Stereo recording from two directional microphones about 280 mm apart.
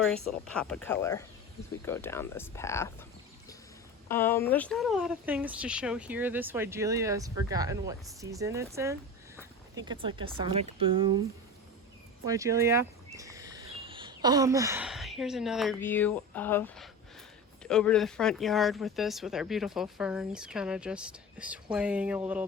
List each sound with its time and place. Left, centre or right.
0.3 s speech: centre
4.1 s speech: centre
12.2 s speech: centre